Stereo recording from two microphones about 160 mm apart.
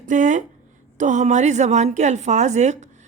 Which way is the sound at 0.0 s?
50° right (ahead or behind).